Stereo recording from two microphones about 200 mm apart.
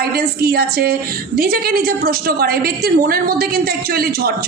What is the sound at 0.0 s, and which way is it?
A woman's voice, 50° right (ahead or behind).